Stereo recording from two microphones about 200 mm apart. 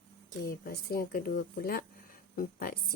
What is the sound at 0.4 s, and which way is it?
A woman's voice, 50° left (ahead or behind).